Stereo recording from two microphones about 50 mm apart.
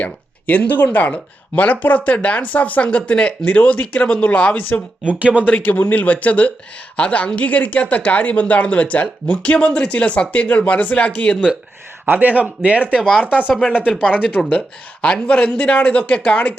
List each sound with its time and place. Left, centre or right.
0.0 s speech: left
5.0 s speech: right
5.5 s speech: left
12.1 s speech: right
13.0 s speech: centre
13.2 s speech: right
13.6 s speech: left